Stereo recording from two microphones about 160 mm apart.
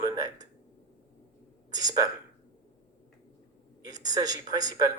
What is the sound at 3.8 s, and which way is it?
Speech, 25° right (ahead or behind).